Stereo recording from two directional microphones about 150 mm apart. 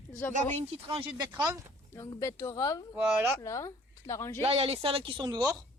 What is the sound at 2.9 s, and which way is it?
Speech, 10° right (ahead or behind).